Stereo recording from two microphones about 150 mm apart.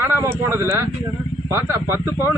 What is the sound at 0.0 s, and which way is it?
Speech, 15° right (ahead or behind).